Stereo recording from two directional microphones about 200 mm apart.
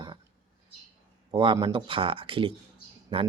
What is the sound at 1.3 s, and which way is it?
Speech, 20° right (ahead or behind).